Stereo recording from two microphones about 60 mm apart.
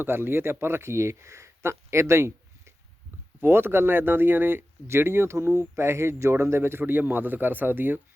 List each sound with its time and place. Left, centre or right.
0.0 s speech: right
3.4 s speech: right